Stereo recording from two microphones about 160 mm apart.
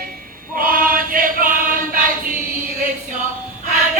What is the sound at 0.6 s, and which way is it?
Choir, 60° right (ahead or behind).